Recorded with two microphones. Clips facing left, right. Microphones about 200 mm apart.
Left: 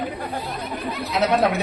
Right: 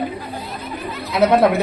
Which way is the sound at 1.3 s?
55° right (ahead or behind).